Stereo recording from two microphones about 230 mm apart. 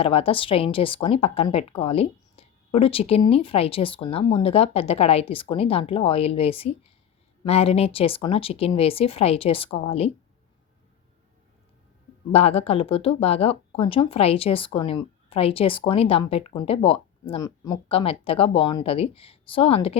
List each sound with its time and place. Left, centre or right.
0.0 s speech: left
12.3 s speech: left